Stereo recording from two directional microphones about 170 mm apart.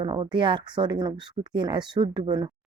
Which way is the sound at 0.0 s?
25° right (ahead or behind).